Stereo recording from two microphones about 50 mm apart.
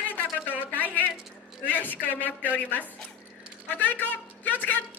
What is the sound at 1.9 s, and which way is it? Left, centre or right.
A woman's voice, left.